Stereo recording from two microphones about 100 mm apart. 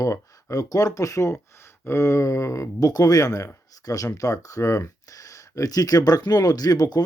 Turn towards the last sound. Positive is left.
turn(degrees=40)  # may be behind; listen again after turning